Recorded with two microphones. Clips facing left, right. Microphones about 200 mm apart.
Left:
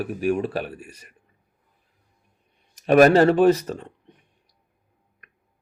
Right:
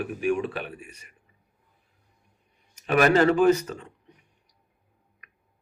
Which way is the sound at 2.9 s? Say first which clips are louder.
Left 5 dB; 40° left (ahead or behind).